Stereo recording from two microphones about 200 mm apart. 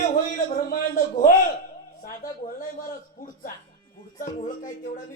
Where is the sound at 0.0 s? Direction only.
40° left (ahead or behind).